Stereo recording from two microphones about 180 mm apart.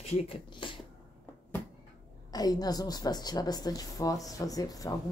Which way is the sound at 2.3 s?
20° left (ahead or behind).